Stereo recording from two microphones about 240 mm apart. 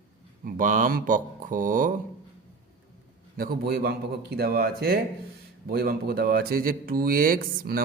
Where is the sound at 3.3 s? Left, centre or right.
Right.